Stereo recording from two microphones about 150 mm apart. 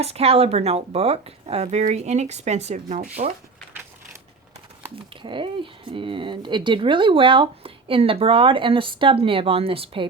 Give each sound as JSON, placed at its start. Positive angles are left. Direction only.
{"t": 0.0, "sound": "speech", "side_deg": -45}
{"t": 5.2, "sound": "speech", "side_deg": -35}